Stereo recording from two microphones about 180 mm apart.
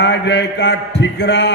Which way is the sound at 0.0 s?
70° left (ahead or behind).